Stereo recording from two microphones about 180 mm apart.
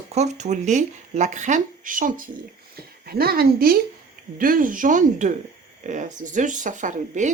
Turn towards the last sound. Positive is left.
turn(degrees=-45)  # may be behind; listen again after turning